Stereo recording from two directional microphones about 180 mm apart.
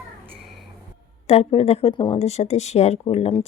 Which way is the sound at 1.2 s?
35° left (ahead or behind).